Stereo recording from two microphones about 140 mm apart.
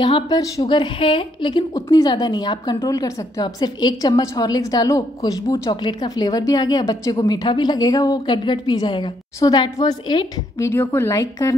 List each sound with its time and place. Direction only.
0.0 s a woman's voice: 35° left (ahead or behind)
10.6 s a woman's voice: 15° left (ahead or behind)